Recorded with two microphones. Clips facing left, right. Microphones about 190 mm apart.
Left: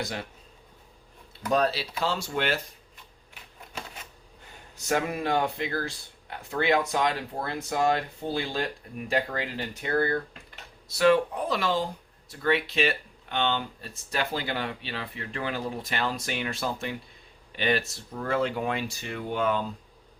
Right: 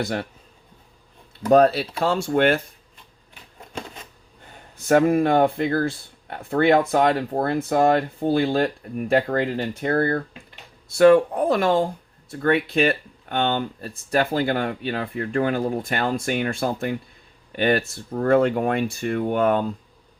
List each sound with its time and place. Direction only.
0.0 s speech: 60° right (ahead or behind)
1.5 s speech: 55° right (ahead or behind)
4.8 s speech: 55° right (ahead or behind)